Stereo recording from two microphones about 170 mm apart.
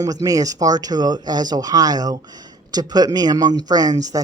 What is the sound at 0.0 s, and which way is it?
Speech, 20° right (ahead or behind).